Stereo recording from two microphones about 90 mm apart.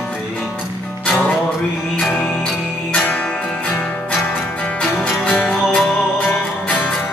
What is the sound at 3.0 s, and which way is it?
Music, 15° left (ahead or behind).